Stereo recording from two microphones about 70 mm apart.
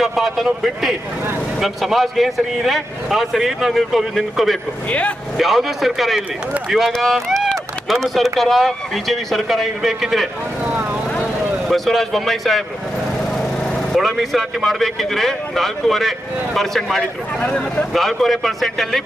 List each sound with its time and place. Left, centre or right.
0.0 s speech: centre
4.9 s speech: centre
5.4 s speech: centre
11.7 s speech: centre
13.6 s a sound: centre
14.2 s speech: centre
17.0 s speech: centre
17.9 s speech: centre